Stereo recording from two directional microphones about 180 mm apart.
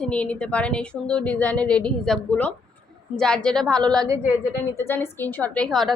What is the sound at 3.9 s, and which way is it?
Speech, 20° right (ahead or behind).